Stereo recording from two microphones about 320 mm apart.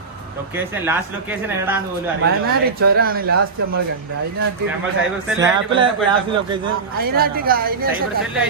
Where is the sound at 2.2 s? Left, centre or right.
Right.